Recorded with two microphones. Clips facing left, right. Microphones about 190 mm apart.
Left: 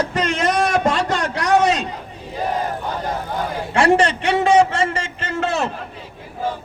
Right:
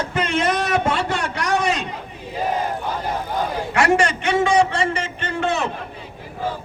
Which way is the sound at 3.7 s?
30° left (ahead or behind).